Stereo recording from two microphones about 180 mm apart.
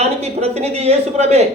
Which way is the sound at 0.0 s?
35° right (ahead or behind).